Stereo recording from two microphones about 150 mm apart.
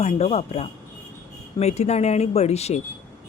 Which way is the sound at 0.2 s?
45° left (ahead or behind).